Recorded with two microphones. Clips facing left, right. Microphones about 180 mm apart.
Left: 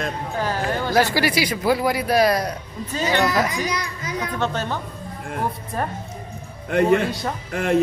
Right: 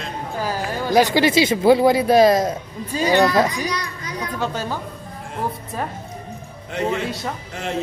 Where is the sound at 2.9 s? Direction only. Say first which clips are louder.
Right 4 dB; 10° right (ahead or behind).